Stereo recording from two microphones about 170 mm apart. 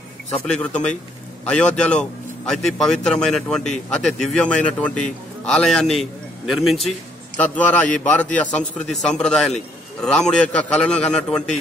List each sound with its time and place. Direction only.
0.3 s a man's voice: 5° left (ahead or behind)